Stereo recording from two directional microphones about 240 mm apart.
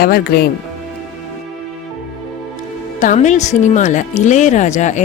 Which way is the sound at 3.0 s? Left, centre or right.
Left.